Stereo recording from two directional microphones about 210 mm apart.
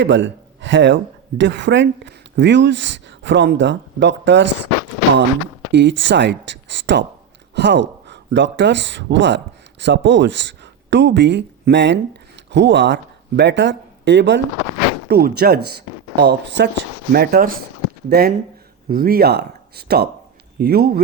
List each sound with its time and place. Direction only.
0.0 s a man's voice: 60° right (ahead or behind)
5.7 s speech: 60° right (ahead or behind)
15.1 s speech: 50° right (ahead or behind)